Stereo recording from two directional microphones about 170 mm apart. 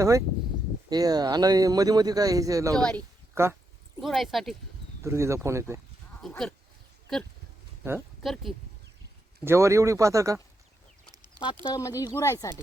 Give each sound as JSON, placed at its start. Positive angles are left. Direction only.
{"t": 0.0, "sound": "speech", "side_deg": -20}
{"t": 2.7, "sound": "speech", "side_deg": 5}
{"t": 3.3, "sound": "speech", "side_deg": -15}
{"t": 4.0, "sound": "speech", "side_deg": 0}
{"t": 5.0, "sound": "speech", "side_deg": -15}
{"t": 6.2, "sound": "speech", "side_deg": 5}
{"t": 8.2, "sound": "speech", "side_deg": 0}
{"t": 9.4, "sound": "speech", "side_deg": -15}
{"t": 11.6, "sound": "speech", "side_deg": 20}